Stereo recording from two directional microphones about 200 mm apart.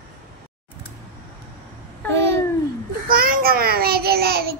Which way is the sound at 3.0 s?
45° right (ahead or behind).